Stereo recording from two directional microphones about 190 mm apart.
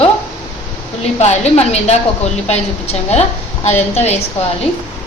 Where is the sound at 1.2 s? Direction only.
35° left (ahead or behind).